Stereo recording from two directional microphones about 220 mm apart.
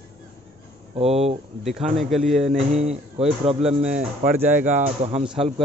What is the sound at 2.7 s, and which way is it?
Speech, 30° right (ahead or behind).